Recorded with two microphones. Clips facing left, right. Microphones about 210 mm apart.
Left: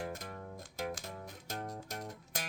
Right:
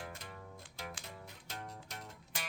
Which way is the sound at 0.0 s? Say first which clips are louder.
Left 7 dB; 45° left (ahead or behind).